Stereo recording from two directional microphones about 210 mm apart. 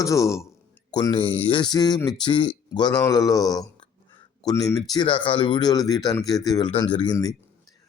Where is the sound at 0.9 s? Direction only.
25° left (ahead or behind).